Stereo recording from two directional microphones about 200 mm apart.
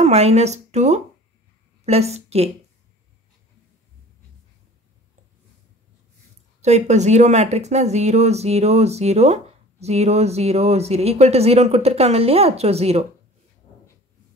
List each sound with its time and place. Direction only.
0.0 s speech: 35° right (ahead or behind)
6.6 s speech: 35° right (ahead or behind)